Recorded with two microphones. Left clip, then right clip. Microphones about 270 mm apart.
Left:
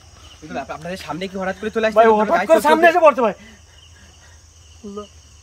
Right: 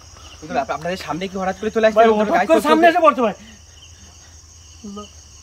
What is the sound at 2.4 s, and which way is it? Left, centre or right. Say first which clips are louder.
Speech: left 1 dB; centre.